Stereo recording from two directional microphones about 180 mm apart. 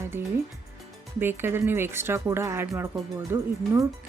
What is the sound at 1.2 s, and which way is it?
Speech, 10° right (ahead or behind).